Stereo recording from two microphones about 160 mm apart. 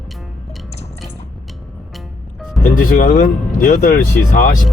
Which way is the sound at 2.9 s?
60° left (ahead or behind).